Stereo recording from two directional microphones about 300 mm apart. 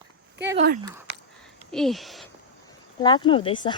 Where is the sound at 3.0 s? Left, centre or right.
Centre.